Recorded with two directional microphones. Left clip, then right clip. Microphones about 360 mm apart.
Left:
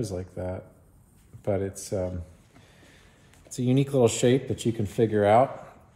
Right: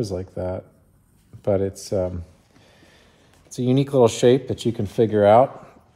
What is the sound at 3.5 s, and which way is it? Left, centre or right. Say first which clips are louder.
Speech: right 5 dB; right.